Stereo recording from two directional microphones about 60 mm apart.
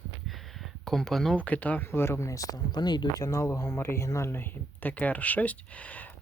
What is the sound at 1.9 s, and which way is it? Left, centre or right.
Speech, left.